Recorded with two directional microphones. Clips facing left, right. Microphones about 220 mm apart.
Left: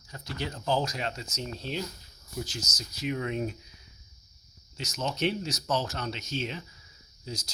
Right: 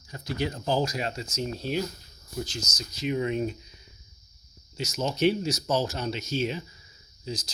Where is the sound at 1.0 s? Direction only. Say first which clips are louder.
Right 2 dB; 35° right (ahead or behind).